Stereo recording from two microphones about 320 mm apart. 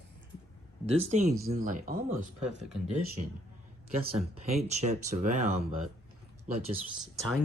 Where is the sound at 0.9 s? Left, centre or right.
Centre.